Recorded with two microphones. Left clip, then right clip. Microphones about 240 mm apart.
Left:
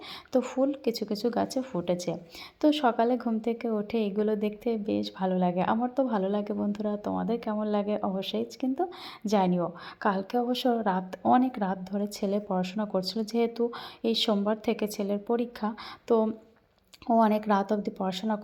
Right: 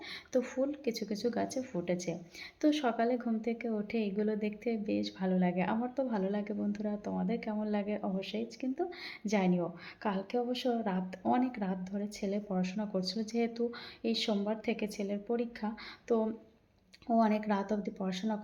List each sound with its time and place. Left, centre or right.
0.3 s a woman's voice: left